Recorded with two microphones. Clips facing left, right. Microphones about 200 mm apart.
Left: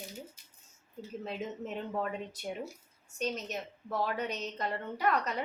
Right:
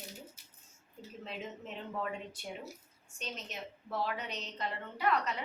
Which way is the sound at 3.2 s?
45° left (ahead or behind).